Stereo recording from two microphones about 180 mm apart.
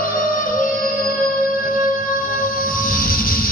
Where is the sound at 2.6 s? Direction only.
50° left (ahead or behind).